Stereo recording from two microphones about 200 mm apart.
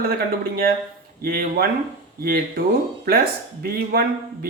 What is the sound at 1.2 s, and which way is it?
Speech, 50° right (ahead or behind).